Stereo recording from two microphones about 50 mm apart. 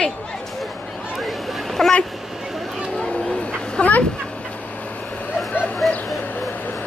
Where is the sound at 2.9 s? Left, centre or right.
Centre.